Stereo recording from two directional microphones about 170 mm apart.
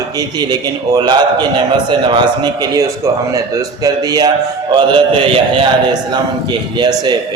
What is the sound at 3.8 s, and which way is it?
A man's voice, 25° right (ahead or behind).